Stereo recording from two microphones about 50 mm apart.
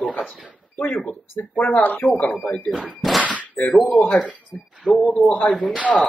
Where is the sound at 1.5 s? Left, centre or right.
Left.